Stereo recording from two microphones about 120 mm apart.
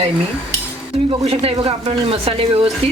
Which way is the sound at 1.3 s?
55° right (ahead or behind).